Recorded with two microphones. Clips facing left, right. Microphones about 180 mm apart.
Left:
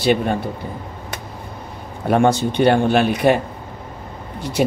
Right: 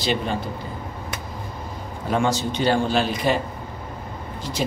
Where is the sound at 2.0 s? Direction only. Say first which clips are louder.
Left 6 dB; 60° left (ahead or behind).